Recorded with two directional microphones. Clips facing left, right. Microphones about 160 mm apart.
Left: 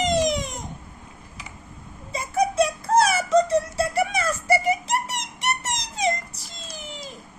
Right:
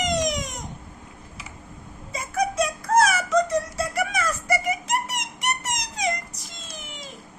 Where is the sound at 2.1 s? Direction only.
30° left (ahead or behind).